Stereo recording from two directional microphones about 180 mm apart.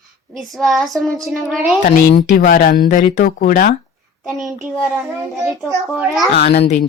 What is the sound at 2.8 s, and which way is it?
Speech, 45° left (ahead or behind).